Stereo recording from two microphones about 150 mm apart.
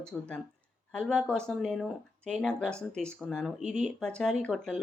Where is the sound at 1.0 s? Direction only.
5° left (ahead or behind).